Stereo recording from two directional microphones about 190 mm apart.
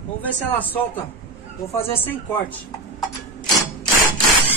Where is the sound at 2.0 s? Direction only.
10° left (ahead or behind).